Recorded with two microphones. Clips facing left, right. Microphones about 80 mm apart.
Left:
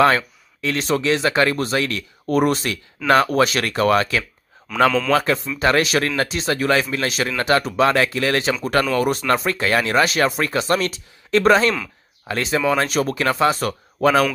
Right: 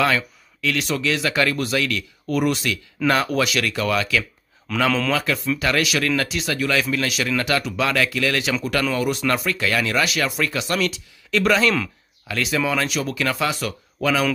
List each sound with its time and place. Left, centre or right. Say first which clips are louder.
0.0 s speech: left 5 dB; left
4.7 s a man's voice: left 5 dB; centre
5.1 s speech: left 3 dB; left